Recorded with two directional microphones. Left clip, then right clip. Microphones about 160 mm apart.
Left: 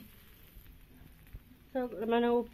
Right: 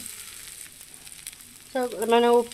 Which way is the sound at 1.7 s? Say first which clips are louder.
Right 10 dB; 25° right (ahead or behind).